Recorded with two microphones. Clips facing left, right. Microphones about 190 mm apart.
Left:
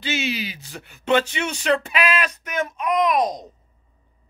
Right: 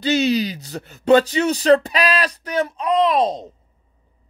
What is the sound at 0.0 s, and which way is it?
Speech, 40° right (ahead or behind).